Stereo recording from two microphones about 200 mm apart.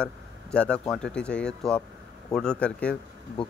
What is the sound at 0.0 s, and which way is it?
Speech, 5° left (ahead or behind).